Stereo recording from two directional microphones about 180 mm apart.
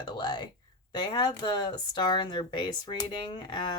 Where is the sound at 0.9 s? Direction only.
25° left (ahead or behind).